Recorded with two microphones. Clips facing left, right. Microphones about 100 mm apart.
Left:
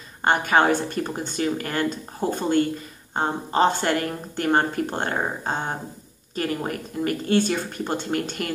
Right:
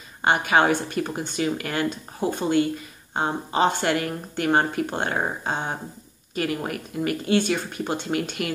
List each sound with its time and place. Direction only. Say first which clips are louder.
0.2 s speech: even; 40° left (ahead or behind)